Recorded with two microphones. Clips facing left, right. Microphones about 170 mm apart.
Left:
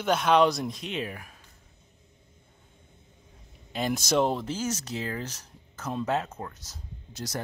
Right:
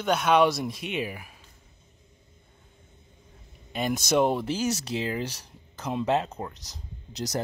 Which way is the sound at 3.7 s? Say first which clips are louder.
Right 1 dB; centre (ahead or behind).